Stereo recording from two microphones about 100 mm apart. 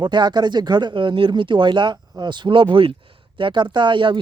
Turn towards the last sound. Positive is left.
turn(degrees=-55)  # may be behind; listen again after turning